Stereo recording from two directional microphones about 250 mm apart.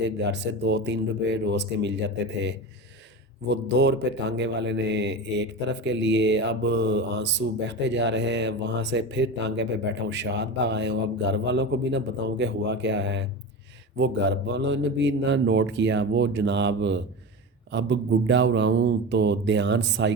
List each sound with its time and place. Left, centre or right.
0.2 s speech: right
3.4 s speech: right